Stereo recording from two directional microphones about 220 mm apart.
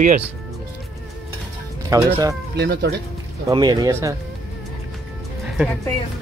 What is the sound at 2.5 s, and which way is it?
Speech, 50° right (ahead or behind).